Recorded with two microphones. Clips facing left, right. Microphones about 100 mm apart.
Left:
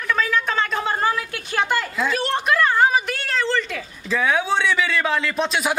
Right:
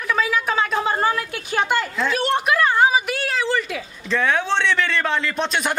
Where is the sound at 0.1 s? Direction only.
5° right (ahead or behind).